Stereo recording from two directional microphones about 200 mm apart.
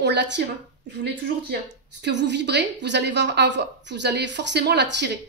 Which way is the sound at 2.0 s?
60° right (ahead or behind).